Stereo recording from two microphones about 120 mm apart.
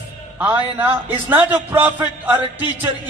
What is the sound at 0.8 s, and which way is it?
A man's voice, 15° right (ahead or behind).